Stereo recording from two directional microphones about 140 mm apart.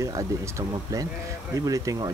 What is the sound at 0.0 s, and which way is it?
Speech, 25° right (ahead or behind).